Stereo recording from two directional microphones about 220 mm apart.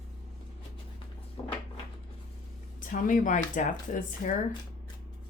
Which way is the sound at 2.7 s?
35° left (ahead or behind).